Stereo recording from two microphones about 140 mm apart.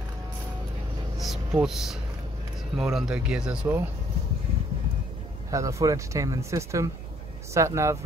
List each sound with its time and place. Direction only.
1.1 s speech: centre (ahead or behind)
5.5 s speech: 20° right (ahead or behind)